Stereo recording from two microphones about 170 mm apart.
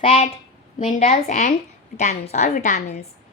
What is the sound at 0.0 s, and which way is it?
A woman's voice, 35° left (ahead or behind).